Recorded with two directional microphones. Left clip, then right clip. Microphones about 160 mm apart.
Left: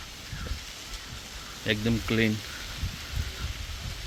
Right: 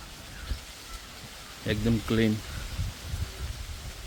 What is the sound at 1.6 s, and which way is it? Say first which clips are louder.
Speech: left 1 dB; 10° right (ahead or behind).